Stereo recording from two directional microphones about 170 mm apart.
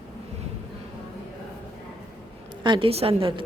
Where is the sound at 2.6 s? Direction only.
30° right (ahead or behind).